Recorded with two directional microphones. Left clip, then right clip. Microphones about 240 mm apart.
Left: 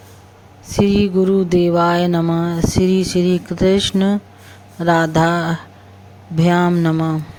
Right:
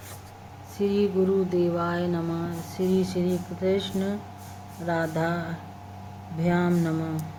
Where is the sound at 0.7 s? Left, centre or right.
Left.